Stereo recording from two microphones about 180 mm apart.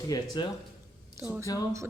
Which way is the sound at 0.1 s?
25° left (ahead or behind).